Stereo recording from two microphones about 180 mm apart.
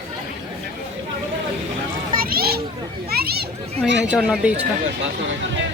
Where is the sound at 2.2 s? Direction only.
55° right (ahead or behind).